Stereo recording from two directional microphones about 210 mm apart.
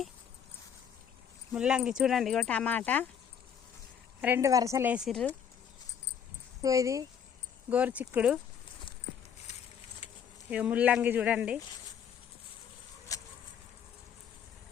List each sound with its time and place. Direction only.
1.5 s speech: 5° right (ahead or behind)
4.2 s a woman's voice: 10° right (ahead or behind)
6.6 s a woman's voice: 15° right (ahead or behind)
10.5 s speech: 5° right (ahead or behind)
13.1 s a sound: 15° left (ahead or behind)